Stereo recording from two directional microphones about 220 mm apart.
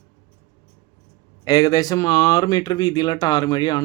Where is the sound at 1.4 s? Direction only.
15° left (ahead or behind).